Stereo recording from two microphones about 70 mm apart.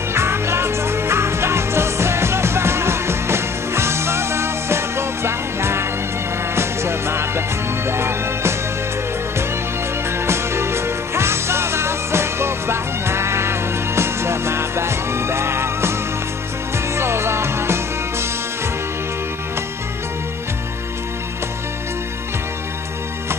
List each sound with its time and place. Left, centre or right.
0.1 s music: right
10.1 s music: right